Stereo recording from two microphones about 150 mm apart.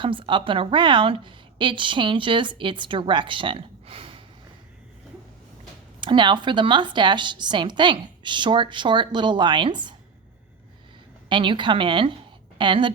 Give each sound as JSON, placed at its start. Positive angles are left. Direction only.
{"t": 0.0, "sound": "a woman's voice", "side_deg": -35}
{"t": 6.0, "sound": "a woman's voice", "side_deg": -30}
{"t": 11.3, "sound": "a woman's voice", "side_deg": -35}